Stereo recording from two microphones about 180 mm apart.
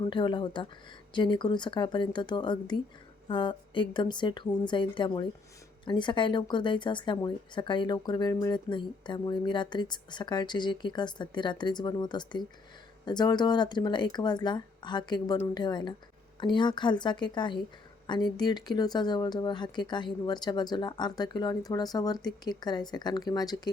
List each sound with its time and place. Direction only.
0.0 s speech: 25° left (ahead or behind)